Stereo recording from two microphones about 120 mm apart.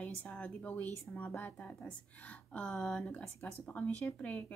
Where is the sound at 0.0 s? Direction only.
10° left (ahead or behind).